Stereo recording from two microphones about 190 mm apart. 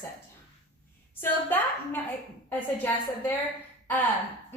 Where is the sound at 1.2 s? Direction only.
10° left (ahead or behind).